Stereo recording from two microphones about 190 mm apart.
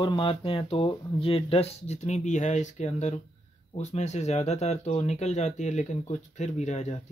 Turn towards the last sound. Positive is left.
turn(degrees=35)  # may be behind; listen again after turning